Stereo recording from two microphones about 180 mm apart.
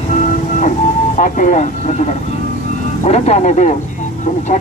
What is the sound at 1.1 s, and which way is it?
Speech, 45° left (ahead or behind).